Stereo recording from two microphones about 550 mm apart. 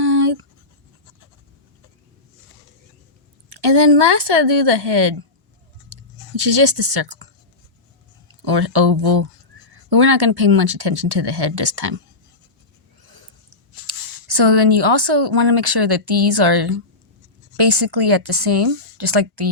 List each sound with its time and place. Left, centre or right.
0.0 s writing: right
3.5 s speech: right
8.4 s speech: right
13.0 s a sound: right
13.8 s speech: right